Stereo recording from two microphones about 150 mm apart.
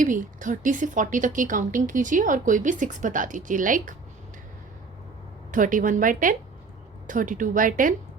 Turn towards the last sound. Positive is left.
turn(degrees=-65)  # may be behind; listen again after turning